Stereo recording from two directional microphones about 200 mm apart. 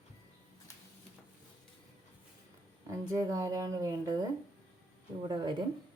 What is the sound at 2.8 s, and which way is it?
Speech, 15° right (ahead or behind).